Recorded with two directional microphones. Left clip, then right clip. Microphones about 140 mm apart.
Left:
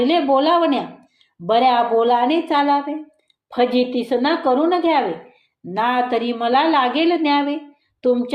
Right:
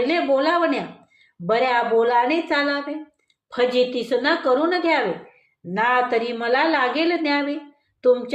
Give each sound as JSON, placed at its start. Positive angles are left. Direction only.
{"t": 0.0, "sound": "a woman's voice", "side_deg": 30}